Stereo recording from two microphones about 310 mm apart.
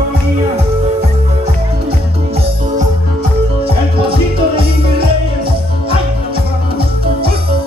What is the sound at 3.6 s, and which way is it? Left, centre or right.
Music, centre.